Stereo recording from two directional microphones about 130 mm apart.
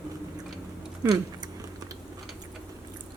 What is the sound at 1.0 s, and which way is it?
Chewing, 35° right (ahead or behind).